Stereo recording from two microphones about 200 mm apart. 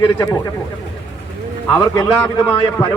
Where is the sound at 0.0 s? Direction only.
15° left (ahead or behind).